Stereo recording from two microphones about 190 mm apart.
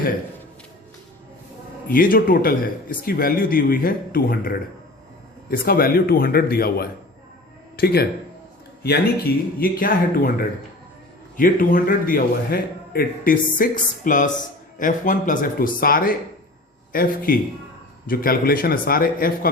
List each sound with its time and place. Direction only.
1.9 s a man's voice: 50° left (ahead or behind)